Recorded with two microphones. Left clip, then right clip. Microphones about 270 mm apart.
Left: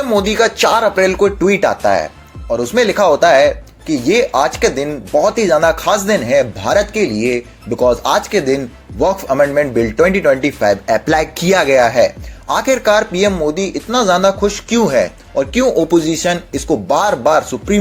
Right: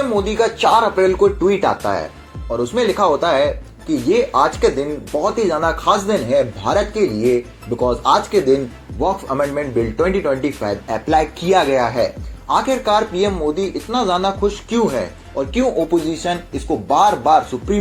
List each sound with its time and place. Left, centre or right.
0.1 s speech: left